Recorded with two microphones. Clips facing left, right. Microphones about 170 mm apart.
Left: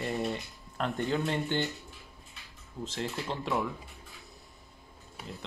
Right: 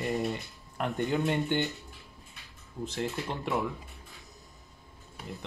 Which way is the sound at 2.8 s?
15° right (ahead or behind).